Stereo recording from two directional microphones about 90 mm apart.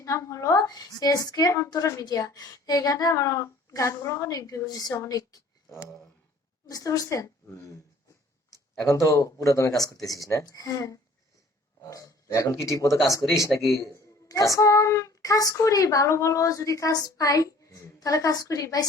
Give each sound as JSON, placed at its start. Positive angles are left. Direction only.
{"t": 0.0, "sound": "a woman's voice", "side_deg": 35}
{"t": 6.7, "sound": "a woman's voice", "side_deg": 40}
{"t": 8.8, "sound": "a woman's voice", "side_deg": 35}
{"t": 13.2, "sound": "speech", "side_deg": 0}
{"t": 13.8, "sound": "a woman's voice", "side_deg": 40}